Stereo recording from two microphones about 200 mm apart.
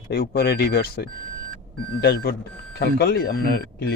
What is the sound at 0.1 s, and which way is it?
Speech, 50° left (ahead or behind).